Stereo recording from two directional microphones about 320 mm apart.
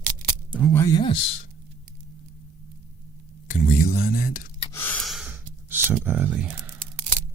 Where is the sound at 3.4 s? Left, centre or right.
Left.